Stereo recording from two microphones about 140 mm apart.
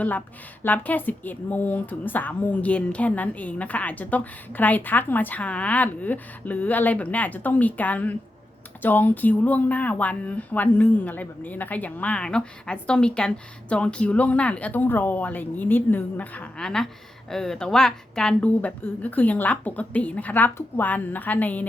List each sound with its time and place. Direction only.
0.6 s speech: 10° left (ahead or behind)